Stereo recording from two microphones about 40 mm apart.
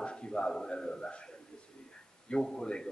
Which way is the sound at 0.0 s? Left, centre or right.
Left.